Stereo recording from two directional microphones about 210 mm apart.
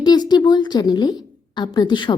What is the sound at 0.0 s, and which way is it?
A woman's voice, 20° left (ahead or behind).